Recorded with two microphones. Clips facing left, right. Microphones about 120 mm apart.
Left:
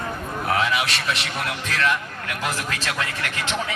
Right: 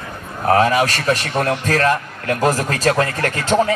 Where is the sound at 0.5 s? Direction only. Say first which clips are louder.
Right 9 dB; 45° right (ahead or behind).